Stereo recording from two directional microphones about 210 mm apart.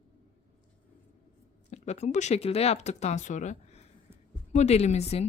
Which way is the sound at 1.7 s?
30° left (ahead or behind).